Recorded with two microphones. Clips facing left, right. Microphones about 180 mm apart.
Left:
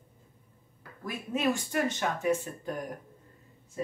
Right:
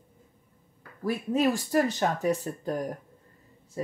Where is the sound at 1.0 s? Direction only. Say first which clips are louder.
Right 5 dB; 35° right (ahead or behind).